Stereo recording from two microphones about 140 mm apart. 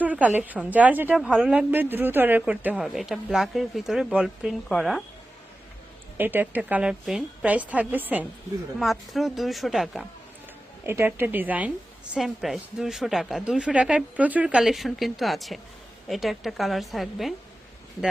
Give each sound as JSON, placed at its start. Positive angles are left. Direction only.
{"t": 0.0, "sound": "a woman's voice", "side_deg": -10}
{"t": 6.1, "sound": "a woman's voice", "side_deg": -15}
{"t": 8.8, "sound": "speech", "side_deg": 0}
{"t": 10.8, "sound": "a woman's voice", "side_deg": -15}